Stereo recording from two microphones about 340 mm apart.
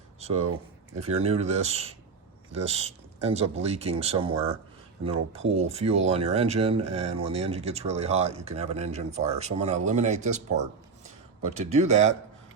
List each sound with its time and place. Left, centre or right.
0.2 s speech: centre